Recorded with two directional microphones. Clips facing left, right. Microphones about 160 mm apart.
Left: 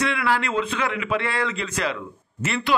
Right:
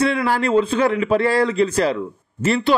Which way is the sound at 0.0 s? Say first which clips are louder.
Right 5 dB; 35° right (ahead or behind).